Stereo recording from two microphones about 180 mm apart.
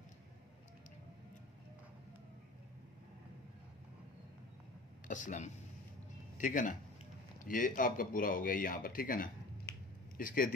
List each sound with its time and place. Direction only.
5.0 s speech: 45° left (ahead or behind)